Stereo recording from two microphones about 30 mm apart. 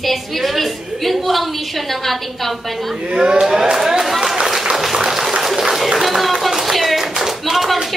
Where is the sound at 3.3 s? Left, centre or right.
Centre.